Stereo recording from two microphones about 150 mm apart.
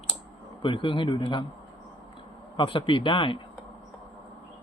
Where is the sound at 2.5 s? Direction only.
35° left (ahead or behind).